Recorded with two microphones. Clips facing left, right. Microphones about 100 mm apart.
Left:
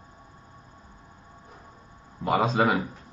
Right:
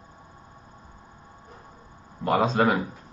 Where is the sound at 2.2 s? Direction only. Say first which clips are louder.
Right 1 dB; centre (ahead or behind).